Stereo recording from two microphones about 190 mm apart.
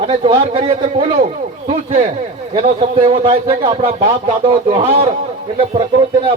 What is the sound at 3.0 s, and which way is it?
A man's voice, 25° right (ahead or behind).